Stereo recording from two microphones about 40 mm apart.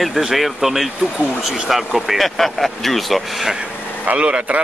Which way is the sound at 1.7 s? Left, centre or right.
Centre.